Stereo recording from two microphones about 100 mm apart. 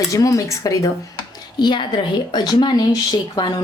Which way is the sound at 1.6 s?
50° left (ahead or behind).